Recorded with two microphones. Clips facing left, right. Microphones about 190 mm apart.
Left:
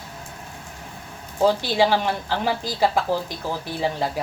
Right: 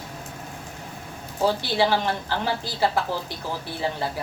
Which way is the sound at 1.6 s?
15° left (ahead or behind).